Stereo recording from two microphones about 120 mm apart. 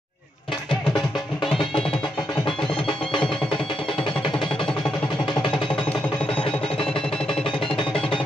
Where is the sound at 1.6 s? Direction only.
45° left (ahead or behind).